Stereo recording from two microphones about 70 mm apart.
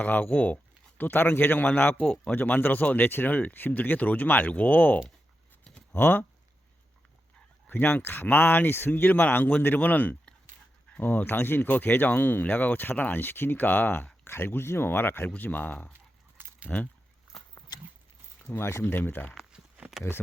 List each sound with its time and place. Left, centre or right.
0.0 s speech: left
7.7 s speech: left
18.4 s speech: left
19.3 s walk: centre